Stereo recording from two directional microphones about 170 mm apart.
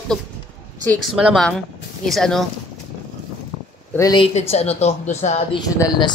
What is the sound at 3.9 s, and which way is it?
Speech, 20° left (ahead or behind).